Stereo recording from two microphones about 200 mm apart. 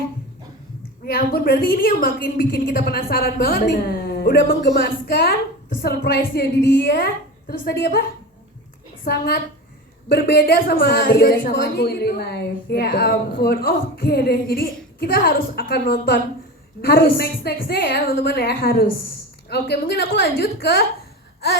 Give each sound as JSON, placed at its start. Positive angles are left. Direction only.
{"t": 1.0, "sound": "a woman's voice", "side_deg": 50}
{"t": 9.0, "sound": "a woman's voice", "side_deg": 50}